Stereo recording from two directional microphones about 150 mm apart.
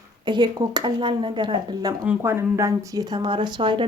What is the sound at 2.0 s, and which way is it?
Speech, 10° right (ahead or behind).